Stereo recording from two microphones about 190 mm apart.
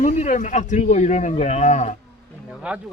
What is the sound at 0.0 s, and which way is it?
Speech, 40° left (ahead or behind).